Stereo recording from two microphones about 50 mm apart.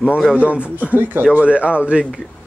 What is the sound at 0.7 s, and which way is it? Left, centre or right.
Speech, right.